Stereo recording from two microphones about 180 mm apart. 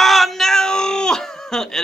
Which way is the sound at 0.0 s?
Centre (ahead or behind).